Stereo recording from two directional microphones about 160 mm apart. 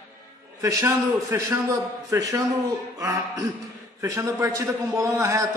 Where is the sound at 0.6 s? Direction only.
20° right (ahead or behind).